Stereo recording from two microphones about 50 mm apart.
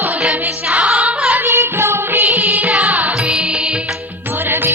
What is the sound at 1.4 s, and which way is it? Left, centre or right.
Music, right.